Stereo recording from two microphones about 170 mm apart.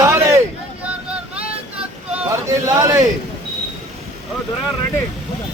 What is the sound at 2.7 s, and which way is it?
Speech, 20° right (ahead or behind).